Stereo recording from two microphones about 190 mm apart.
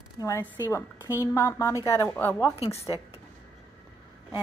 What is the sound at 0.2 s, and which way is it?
A woman's voice, 15° left (ahead or behind).